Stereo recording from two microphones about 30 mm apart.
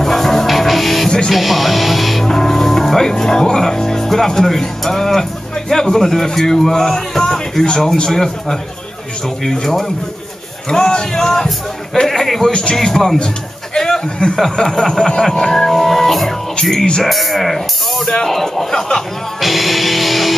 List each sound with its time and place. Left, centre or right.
0.0 s music: centre
1.0 s music: left
1.3 s music: centre
2.2 s music: centre
4.4 s a man's voice: centre
10.7 s a man's voice: left; by 18.0 s centre
18.0 s a man's voice: centre
19.4 s speech: centre